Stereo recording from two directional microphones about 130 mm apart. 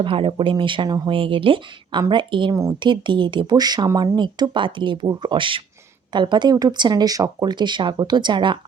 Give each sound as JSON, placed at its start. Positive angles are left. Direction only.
{"t": 0.0, "sound": "speech", "side_deg": -45}